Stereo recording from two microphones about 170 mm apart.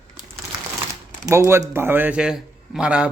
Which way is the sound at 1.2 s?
15° right (ahead or behind).